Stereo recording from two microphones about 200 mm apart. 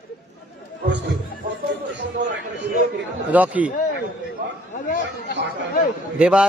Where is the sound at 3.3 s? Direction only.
5° right (ahead or behind).